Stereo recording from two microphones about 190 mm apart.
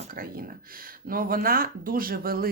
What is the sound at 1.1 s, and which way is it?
Speech, 50° right (ahead or behind).